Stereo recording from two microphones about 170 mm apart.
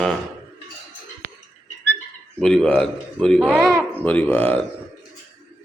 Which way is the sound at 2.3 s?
5° left (ahead or behind).